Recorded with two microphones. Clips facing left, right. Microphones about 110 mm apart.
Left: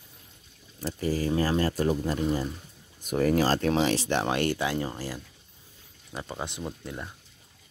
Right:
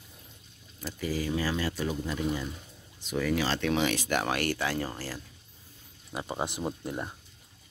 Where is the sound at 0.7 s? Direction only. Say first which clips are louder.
Left 4 dB; 35° left (ahead or behind); by 5.2 s 15° left (ahead or behind).